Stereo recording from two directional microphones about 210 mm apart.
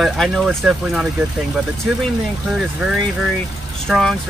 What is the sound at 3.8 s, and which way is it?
Speech, centre (ahead or behind).